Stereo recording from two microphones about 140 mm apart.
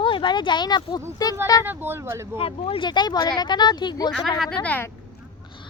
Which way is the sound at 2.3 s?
40° left (ahead or behind).